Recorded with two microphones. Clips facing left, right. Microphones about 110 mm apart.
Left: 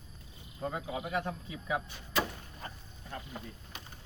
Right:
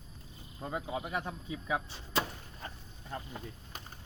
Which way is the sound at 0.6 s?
20° right (ahead or behind).